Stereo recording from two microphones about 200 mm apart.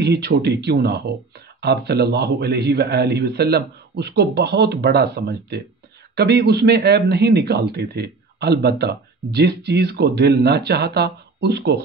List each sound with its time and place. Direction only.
0.0 s a man's voice: 60° right (ahead or behind)